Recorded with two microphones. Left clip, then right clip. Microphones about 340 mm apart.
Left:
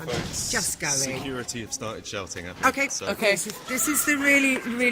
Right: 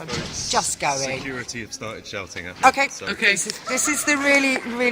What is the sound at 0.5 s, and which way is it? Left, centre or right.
Speech, centre.